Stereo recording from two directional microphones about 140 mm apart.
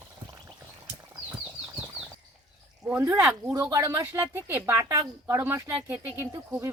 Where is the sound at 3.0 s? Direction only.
20° right (ahead or behind).